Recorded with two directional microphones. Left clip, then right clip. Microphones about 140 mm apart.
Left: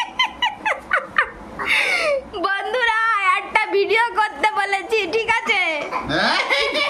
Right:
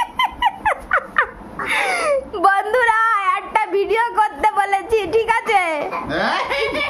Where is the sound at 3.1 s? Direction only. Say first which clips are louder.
Even; 25° right (ahead or behind); by 5.9 s 40° right (ahead or behind).